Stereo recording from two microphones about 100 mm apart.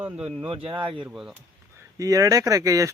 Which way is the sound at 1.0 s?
5° right (ahead or behind).